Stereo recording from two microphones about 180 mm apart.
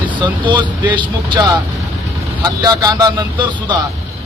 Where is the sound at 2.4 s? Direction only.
20° right (ahead or behind).